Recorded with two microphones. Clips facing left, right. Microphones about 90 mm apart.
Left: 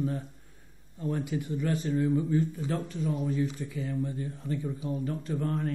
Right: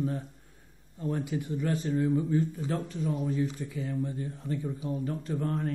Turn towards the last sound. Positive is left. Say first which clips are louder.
# even
turn(degrees=-30)  # may be behind; listen again after turning